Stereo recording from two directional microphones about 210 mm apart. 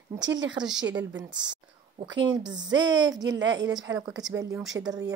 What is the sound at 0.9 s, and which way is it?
Speech, 60° right (ahead or behind).